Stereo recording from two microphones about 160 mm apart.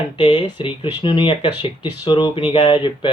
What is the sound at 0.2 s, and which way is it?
Speech, 30° left (ahead or behind).